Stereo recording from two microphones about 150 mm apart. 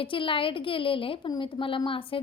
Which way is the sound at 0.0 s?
35° left (ahead or behind).